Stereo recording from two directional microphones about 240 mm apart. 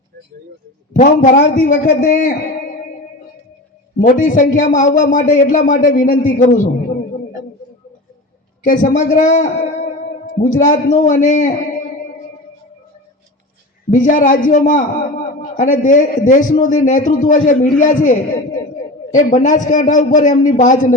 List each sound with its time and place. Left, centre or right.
0.9 s speech: left
4.0 s speech: left
8.6 s speech: left
13.9 s speech: left